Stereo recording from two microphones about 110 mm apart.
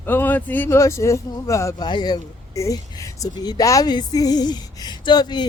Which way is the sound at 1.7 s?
40° left (ahead or behind).